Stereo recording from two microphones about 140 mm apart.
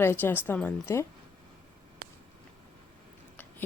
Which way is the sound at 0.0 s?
15° left (ahead or behind).